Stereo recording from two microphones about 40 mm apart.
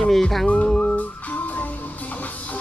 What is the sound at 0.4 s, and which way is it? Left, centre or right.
Music, left.